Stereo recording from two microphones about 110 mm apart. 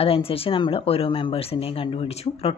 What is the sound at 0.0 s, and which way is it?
Speech, 60° left (ahead or behind).